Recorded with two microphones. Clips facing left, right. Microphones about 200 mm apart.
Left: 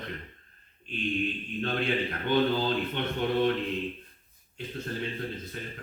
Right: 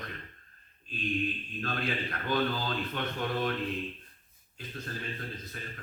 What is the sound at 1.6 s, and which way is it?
A man's voice, 25° left (ahead or behind).